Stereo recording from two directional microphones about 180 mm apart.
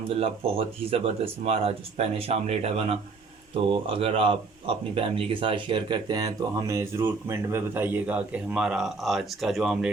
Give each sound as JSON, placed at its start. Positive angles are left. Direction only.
{"t": 0.1, "sound": "speech", "side_deg": -30}